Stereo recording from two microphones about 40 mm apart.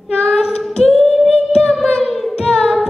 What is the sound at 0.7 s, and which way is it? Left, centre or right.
Singing, centre.